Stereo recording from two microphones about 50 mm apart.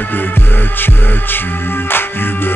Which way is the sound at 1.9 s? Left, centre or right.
Left.